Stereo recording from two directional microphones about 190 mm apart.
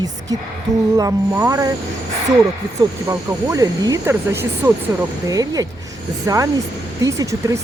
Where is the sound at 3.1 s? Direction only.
15° right (ahead or behind).